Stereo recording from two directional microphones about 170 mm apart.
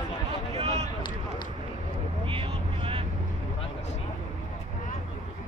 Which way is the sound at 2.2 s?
30° right (ahead or behind).